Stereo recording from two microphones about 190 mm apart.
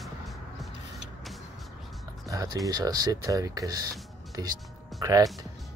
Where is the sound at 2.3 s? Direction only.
20° right (ahead or behind).